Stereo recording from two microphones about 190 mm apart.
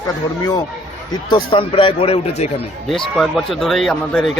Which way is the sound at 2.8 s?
Centre (ahead or behind).